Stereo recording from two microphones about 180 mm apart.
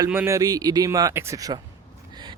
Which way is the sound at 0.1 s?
10° right (ahead or behind).